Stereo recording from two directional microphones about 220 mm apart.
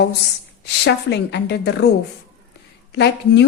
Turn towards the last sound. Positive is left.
turn(degrees=50)  # may be behind; listen again after turning